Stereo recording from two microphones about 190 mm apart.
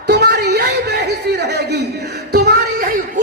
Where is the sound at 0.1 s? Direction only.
60° right (ahead or behind).